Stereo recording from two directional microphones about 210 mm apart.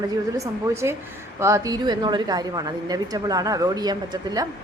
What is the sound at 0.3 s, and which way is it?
A woman's voice, 15° right (ahead or behind).